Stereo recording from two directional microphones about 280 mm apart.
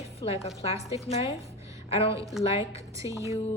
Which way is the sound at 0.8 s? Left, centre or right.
Centre.